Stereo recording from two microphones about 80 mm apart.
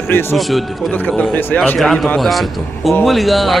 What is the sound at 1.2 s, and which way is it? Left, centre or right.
Speech, centre.